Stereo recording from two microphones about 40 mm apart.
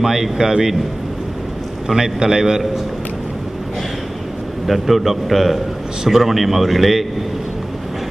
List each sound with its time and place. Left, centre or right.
0.0 s a man's voice: centre
2.0 s a man's voice: centre
4.6 s a man's voice: centre